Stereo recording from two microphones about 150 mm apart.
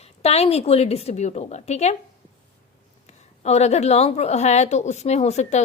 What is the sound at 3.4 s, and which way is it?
A woman's voice, 45° left (ahead or behind).